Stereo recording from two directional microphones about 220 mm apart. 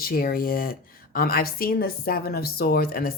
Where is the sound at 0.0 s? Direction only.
45° left (ahead or behind).